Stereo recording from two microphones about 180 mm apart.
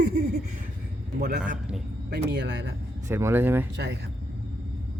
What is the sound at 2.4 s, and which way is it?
Speech, 85° right.